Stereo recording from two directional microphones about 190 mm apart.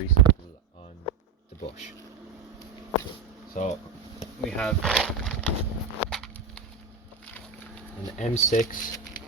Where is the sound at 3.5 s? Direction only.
40° left (ahead or behind).